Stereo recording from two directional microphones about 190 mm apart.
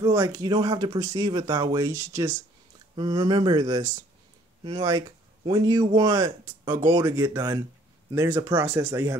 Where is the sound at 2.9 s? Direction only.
25° right (ahead or behind).